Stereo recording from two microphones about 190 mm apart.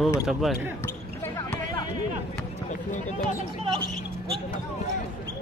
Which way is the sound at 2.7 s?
40° left (ahead or behind).